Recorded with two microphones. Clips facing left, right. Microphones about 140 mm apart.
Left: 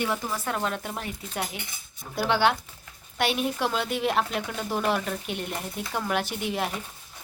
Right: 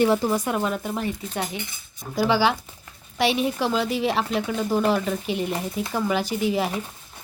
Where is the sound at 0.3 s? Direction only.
10° right (ahead or behind).